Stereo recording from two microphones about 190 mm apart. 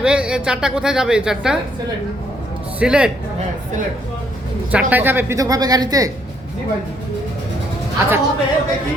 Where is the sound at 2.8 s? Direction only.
5° right (ahead or behind).